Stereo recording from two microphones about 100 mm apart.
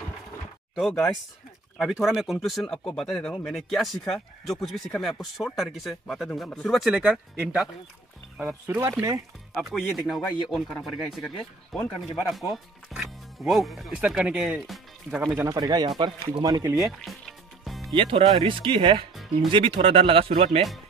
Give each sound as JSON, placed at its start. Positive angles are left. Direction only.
{"t": 0.7, "sound": "speech", "side_deg": 5}
{"t": 8.5, "sound": "speech", "side_deg": -20}
{"t": 9.6, "sound": "speech", "side_deg": 0}
{"t": 15.4, "sound": "speech", "side_deg": -40}
{"t": 16.7, "sound": "music", "side_deg": 0}
{"t": 17.9, "sound": "speech", "side_deg": -55}